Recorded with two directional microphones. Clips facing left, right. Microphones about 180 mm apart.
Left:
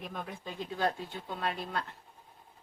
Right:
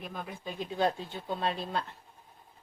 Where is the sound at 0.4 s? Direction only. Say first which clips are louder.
Right 3 dB; 20° right (ahead or behind).